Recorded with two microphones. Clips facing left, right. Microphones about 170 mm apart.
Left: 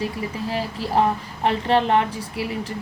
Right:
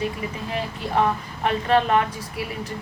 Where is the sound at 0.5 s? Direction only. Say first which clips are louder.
Left 2 dB; 30° left (ahead or behind).